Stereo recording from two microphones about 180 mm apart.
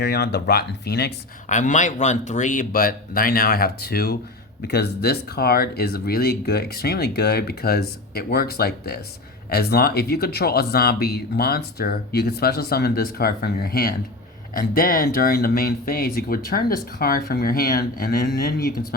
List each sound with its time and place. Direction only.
0.0 s speech: 60° left (ahead or behind)
1.5 s speech: 45° left (ahead or behind)